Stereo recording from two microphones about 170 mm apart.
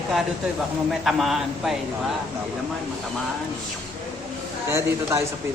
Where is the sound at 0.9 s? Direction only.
Centre (ahead or behind).